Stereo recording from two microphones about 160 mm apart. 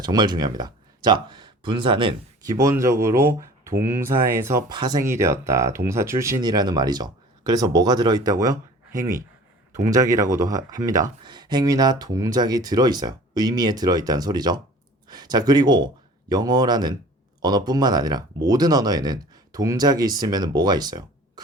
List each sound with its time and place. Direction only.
0.0 s speech: 25° right (ahead or behind)
2.6 s speech: 20° right (ahead or behind)